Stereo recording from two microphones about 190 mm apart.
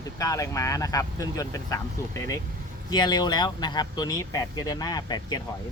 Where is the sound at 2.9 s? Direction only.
20° left (ahead or behind).